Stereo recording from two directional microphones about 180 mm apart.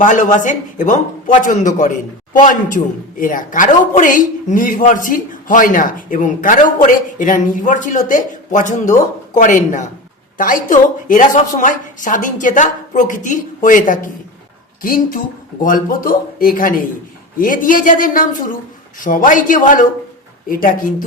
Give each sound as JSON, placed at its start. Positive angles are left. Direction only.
{"t": 0.0, "sound": "a man's voice", "side_deg": 45}